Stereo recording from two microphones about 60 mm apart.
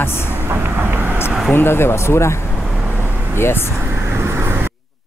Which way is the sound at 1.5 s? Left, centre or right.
Left.